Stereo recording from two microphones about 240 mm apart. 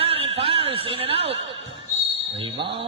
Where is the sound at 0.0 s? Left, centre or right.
Right.